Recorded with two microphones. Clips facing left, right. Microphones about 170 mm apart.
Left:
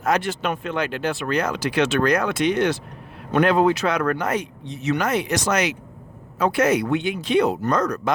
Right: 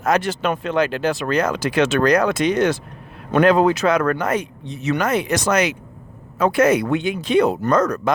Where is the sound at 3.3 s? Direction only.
90° right.